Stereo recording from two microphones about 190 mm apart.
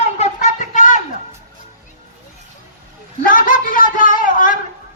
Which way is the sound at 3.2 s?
45° left (ahead or behind).